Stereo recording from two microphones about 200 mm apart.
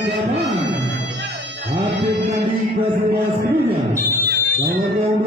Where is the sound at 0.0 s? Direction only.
60° right (ahead or behind).